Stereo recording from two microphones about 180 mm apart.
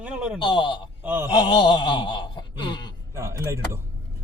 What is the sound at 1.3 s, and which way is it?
Wail, 25° left (ahead or behind).